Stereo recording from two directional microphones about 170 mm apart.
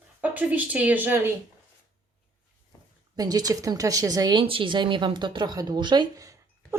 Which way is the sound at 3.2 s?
20° right (ahead or behind).